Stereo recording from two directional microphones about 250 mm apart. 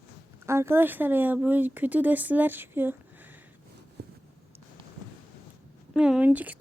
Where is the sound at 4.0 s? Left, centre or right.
Right.